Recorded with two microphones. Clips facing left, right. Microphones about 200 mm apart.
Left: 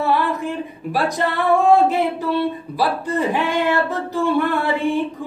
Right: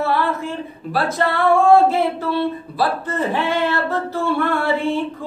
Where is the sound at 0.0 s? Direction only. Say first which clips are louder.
Left 1 dB; 15° left (ahead or behind).